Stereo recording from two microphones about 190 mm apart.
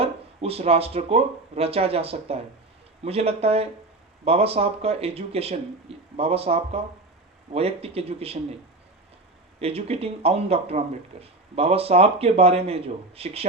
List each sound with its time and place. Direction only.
0.0 s speech: 30° right (ahead or behind)
9.6 s speech: 30° right (ahead or behind)